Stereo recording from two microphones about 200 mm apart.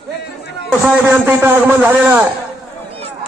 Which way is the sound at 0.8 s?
5° right (ahead or behind).